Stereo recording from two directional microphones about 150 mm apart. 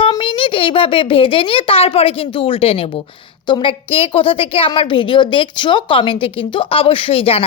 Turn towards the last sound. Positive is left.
turn(degrees=40)  # may be behind; listen again after turning